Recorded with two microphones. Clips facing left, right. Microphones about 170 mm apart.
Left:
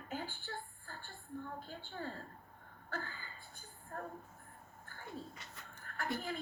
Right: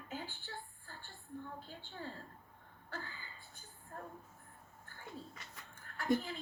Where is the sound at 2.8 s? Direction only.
50° left (ahead or behind).